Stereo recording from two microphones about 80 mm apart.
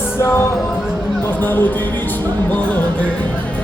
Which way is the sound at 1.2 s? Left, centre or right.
Left.